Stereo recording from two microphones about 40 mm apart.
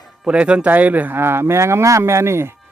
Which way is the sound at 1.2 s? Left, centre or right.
Right.